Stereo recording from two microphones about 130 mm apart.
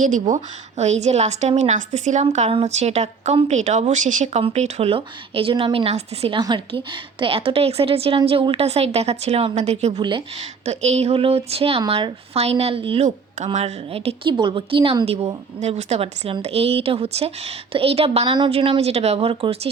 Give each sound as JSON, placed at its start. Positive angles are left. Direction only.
{"t": 0.0, "sound": "a woman's voice", "side_deg": -75}
{"t": 2.5, "sound": "a woman's voice", "side_deg": -50}
{"t": 10.0, "sound": "speech", "side_deg": -35}
{"t": 10.7, "sound": "a woman's voice", "side_deg": -55}
{"t": 13.1, "sound": "a woman's voice", "side_deg": -60}